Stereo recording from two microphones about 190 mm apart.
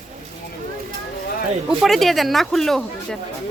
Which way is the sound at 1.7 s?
Centre (ahead or behind).